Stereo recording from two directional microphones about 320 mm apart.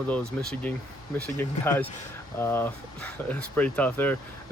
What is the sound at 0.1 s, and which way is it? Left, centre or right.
Speech, centre.